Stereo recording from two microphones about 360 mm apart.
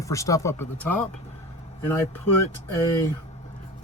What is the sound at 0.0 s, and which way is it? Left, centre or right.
Speech, centre.